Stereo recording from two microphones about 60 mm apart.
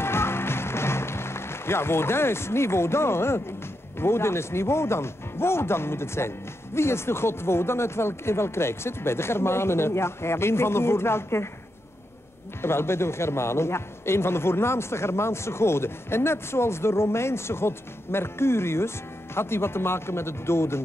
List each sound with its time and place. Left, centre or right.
0.0 s music: left
4.0 s speech: left
12.6 s speech: left